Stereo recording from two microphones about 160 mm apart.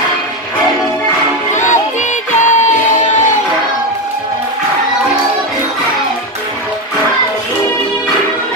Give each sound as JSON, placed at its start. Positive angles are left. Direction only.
{"t": 1.5, "sound": "music", "side_deg": 50}